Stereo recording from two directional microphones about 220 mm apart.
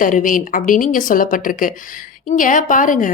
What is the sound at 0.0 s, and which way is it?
A woman's voice, 35° left (ahead or behind).